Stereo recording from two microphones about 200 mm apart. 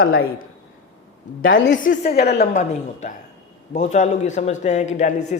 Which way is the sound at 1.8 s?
40° left (ahead or behind).